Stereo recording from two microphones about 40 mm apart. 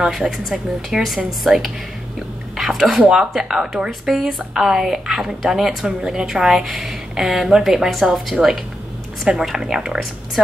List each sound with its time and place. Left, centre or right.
0.0 s speech: centre
2.5 s a sound: centre
3.0 s speech: centre
5.9 s a woman's voice: centre